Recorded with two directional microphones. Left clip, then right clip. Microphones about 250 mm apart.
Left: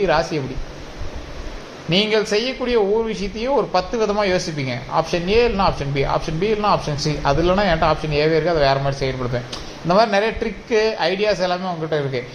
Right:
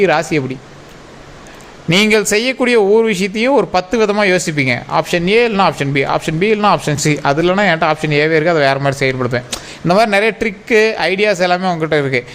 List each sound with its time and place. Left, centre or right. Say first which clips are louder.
0.0 s speech: right 5 dB; right
1.9 s speech: right 6 dB; right